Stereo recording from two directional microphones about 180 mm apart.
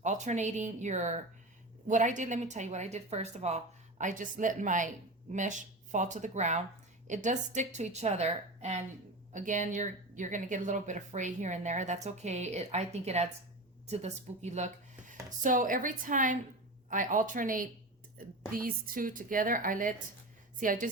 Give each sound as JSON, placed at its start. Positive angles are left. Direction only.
{"t": 0.0, "sound": "a woman's voice", "side_deg": -40}